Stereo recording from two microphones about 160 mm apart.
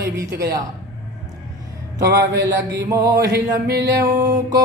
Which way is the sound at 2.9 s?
20° right (ahead or behind).